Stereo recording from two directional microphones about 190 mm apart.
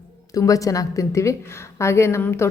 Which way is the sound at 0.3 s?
15° left (ahead or behind).